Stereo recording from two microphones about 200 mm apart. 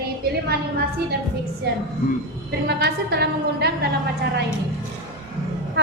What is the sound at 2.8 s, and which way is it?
A woman's voice, 55° right (ahead or behind).